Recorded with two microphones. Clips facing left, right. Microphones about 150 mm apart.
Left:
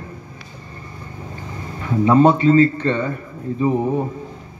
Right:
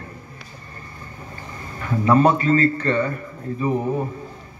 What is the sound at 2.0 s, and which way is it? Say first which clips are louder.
A man's voice: left 4 dB; 20° left (ahead or behind).